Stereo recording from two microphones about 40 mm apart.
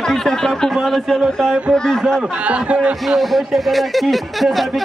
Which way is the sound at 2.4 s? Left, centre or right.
Right.